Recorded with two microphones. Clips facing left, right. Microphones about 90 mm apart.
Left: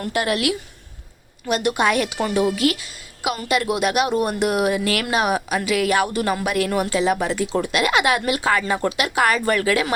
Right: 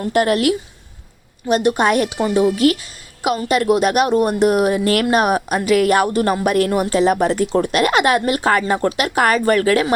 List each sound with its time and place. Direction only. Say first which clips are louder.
0.1 s a woman's voice: right 6 dB; 40° right (ahead or behind)
2.1 s a woman's voice: right 4 dB; 25° right (ahead or behind)